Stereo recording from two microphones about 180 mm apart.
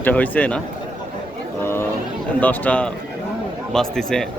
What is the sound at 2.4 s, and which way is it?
A man's voice, 10° left (ahead or behind).